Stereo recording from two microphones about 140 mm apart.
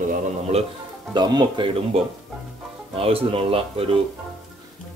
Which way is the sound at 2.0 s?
45° right (ahead or behind).